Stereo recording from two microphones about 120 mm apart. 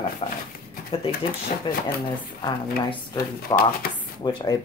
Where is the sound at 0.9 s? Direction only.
55° left (ahead or behind).